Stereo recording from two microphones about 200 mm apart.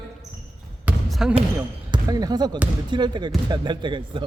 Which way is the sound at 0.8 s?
Centre (ahead or behind).